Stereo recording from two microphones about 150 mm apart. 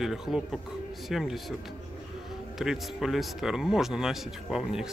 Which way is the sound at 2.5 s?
5° right (ahead or behind).